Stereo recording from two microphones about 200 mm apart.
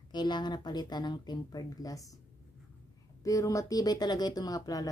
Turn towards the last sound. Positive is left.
turn(degrees=15)  # may be behind; listen again after turning